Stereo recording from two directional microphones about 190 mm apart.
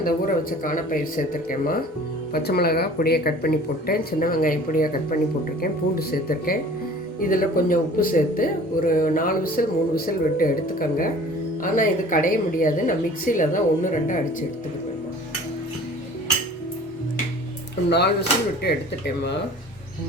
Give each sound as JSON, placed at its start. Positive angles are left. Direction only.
{"t": 0.0, "sound": "speech", "side_deg": 45}
{"t": 6.0, "sound": "speech", "side_deg": 50}
{"t": 17.8, "sound": "speech", "side_deg": 60}